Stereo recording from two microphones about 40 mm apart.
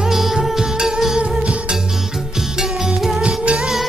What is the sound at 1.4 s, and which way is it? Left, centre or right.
Music, right.